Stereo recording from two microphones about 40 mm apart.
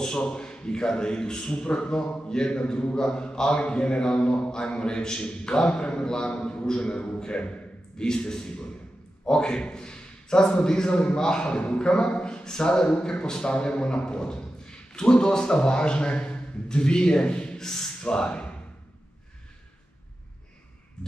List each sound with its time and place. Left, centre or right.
0.2 s a man's voice: left
17.6 s speech: centre